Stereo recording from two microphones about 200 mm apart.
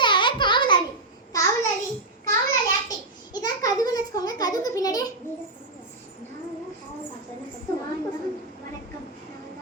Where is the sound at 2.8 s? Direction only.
20° left (ahead or behind).